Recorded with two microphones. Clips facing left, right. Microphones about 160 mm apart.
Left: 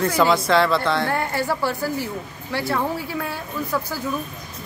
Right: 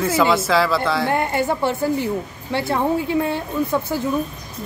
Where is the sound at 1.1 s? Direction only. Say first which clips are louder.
Right 3 dB; 20° right (ahead or behind).